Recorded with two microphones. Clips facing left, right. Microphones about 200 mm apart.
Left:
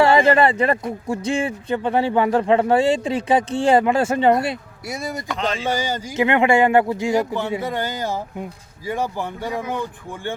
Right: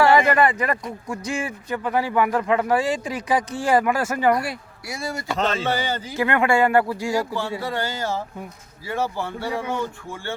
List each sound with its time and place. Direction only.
0.0 s speech: 25° left (ahead or behind)